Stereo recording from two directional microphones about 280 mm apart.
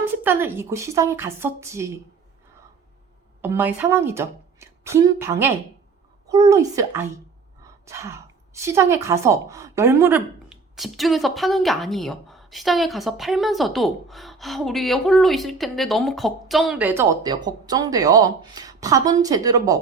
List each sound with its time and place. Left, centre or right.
0.0 s a woman's voice: centre
3.4 s a woman's voice: centre